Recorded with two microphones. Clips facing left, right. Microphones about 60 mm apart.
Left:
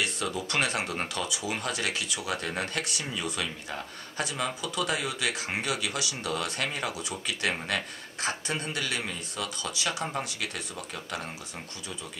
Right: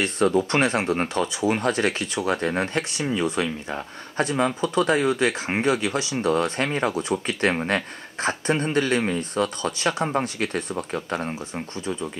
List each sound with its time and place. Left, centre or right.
0.0 s speech: right